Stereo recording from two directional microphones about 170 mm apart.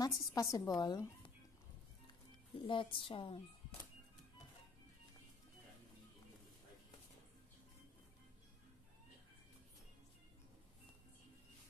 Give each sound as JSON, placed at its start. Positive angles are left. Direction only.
{"t": 0.0, "sound": "a woman's voice", "side_deg": 20}
{"t": 2.6, "sound": "speech", "side_deg": 30}